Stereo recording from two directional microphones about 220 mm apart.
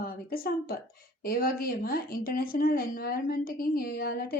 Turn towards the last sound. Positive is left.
turn(degrees=40)  # may be behind; listen again after turning